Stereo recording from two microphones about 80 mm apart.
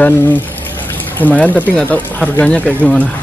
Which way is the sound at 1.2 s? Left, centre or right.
Left.